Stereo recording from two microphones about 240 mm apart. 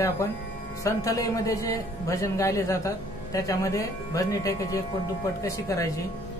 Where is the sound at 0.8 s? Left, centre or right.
Centre.